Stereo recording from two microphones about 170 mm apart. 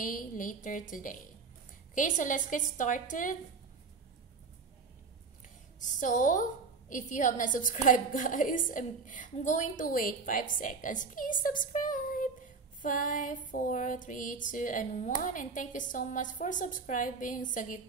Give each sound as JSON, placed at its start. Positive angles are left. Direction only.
{"t": 0.0, "sound": "a woman's voice", "side_deg": 50}
{"t": 5.8, "sound": "a woman's voice", "side_deg": 50}